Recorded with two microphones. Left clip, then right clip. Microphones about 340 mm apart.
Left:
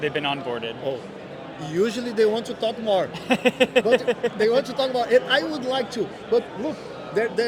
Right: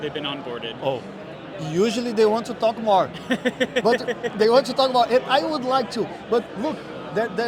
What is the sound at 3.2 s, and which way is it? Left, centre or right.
Speech, left.